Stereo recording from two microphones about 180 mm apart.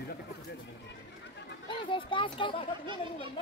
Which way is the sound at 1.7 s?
30° left (ahead or behind).